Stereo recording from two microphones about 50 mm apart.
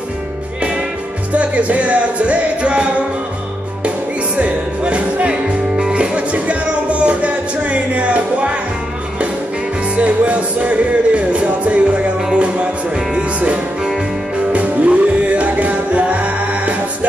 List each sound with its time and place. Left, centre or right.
1.3 s music: right
4.4 s music: right
9.9 s music: right
14.5 s music: right